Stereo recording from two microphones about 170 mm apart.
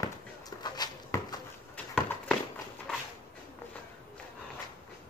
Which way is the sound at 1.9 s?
5° left (ahead or behind).